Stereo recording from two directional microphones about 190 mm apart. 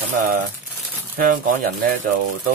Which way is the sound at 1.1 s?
45° right (ahead or behind).